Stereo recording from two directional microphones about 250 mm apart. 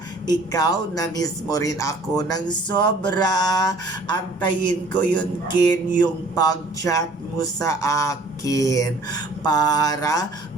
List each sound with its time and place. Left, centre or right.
0.3 s speech: centre